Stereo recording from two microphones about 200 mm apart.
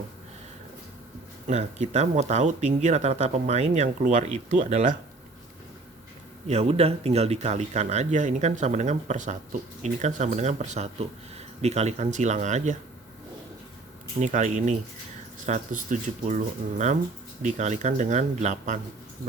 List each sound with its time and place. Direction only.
1.5 s speech: 35° right (ahead or behind)
6.5 s speech: 30° right (ahead or behind)
14.2 s speech: 35° right (ahead or behind)